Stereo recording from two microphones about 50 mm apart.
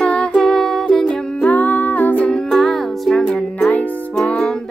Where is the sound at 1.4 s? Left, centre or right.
Left.